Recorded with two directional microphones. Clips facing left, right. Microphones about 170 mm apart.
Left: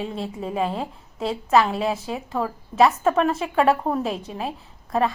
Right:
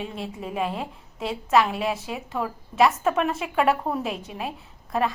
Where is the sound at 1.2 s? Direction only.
Centre (ahead or behind).